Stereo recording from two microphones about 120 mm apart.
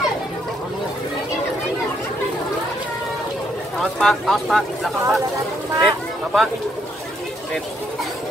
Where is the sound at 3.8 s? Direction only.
Centre (ahead or behind).